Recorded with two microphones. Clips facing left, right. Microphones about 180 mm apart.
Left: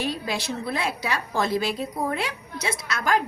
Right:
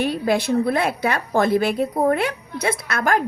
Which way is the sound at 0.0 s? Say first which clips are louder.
Right 8 dB; 55° right (ahead or behind).